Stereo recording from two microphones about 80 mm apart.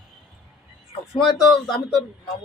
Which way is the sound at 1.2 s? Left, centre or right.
Centre.